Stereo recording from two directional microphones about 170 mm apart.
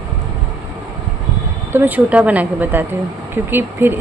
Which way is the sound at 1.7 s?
10° right (ahead or behind).